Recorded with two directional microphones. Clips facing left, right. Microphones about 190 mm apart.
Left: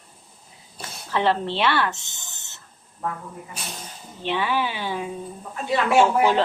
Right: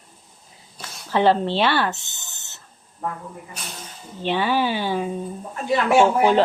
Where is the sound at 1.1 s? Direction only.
35° right (ahead or behind).